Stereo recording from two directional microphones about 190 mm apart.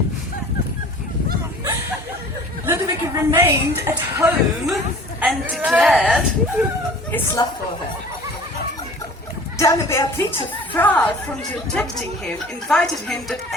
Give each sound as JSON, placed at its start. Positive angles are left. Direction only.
{"t": 2.6, "sound": "chatter", "side_deg": -15}
{"t": 3.3, "sound": "a woman's voice", "side_deg": -10}
{"t": 5.2, "sound": "a woman's voice", "side_deg": -5}
{"t": 7.1, "sound": "a woman's voice", "side_deg": 10}
{"t": 9.6, "sound": "a woman's voice", "side_deg": 15}